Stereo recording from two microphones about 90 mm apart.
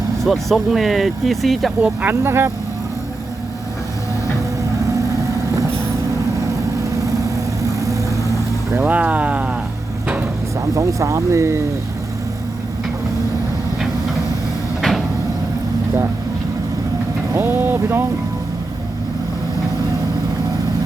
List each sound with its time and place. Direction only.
0.3 s speech: centre (ahead or behind)
1.8 s speech: 20° right (ahead or behind)
7.8 s vehicle: 40° right (ahead or behind)
8.7 s speech: 20° right (ahead or behind)
10.8 s speech: 35° right (ahead or behind)
14.8 s cupboard open or close: centre (ahead or behind)
17.3 s speech: 25° right (ahead or behind)